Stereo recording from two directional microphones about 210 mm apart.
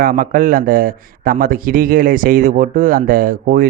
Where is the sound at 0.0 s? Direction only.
40° right (ahead or behind).